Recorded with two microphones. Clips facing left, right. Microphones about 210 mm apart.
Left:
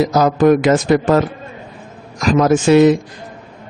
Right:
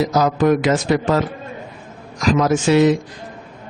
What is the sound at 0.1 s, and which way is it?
A man's voice, 50° left (ahead or behind).